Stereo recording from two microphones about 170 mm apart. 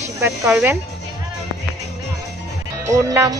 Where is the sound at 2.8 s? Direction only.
15° right (ahead or behind).